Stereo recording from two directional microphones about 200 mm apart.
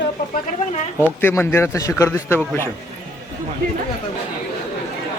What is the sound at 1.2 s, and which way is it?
A man's voice, 10° left (ahead or behind).